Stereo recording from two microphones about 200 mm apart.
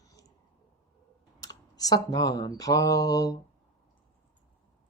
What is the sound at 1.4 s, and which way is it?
Speech, 20° left (ahead or behind).